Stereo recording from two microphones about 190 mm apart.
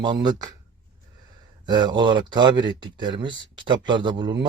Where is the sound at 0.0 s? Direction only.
20° right (ahead or behind).